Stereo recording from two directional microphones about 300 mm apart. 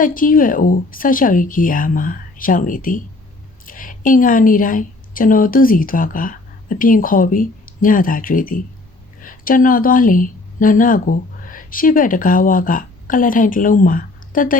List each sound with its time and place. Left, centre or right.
0.0 s a woman's voice: left